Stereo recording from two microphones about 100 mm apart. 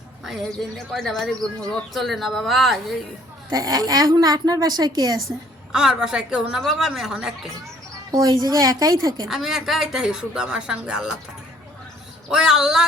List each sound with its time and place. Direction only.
0.3 s speech: 5° left (ahead or behind)
3.5 s a woman's voice: 35° right (ahead or behind)
5.7 s a woman's voice: 5° right (ahead or behind)
8.1 s a woman's voice: 40° right (ahead or behind)
9.2 s speech: centre (ahead or behind)
12.3 s speech: 5° right (ahead or behind)